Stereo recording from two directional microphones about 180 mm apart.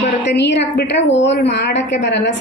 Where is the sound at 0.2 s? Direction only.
75° left (ahead or behind).